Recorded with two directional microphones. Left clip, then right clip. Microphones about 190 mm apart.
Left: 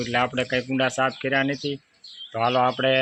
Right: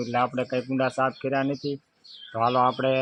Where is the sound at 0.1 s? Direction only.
15° left (ahead or behind).